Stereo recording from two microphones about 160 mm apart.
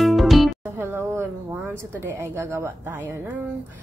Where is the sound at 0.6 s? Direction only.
15° right (ahead or behind).